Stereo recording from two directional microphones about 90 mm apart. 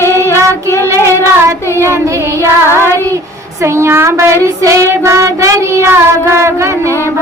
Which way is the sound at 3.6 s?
30° right (ahead or behind).